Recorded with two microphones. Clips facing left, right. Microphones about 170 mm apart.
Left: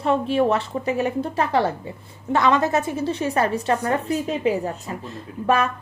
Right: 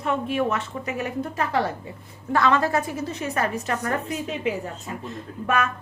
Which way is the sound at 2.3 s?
20° left (ahead or behind).